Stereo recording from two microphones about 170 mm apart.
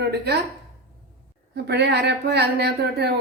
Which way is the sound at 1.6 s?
80° right.